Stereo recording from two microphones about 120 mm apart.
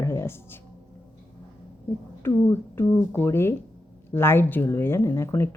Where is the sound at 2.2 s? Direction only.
20° left (ahead or behind).